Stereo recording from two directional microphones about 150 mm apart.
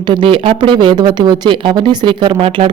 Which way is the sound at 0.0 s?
30° right (ahead or behind).